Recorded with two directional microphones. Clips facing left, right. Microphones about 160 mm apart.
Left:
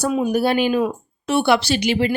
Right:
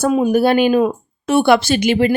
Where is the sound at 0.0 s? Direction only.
50° right (ahead or behind).